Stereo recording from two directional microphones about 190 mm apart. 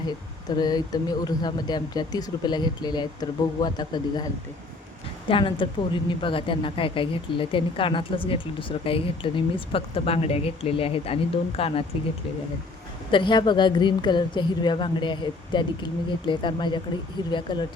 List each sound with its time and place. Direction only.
0.5 s speech: 20° left (ahead or behind)
5.3 s speech: 25° left (ahead or behind)
13.1 s speech: 25° left (ahead or behind)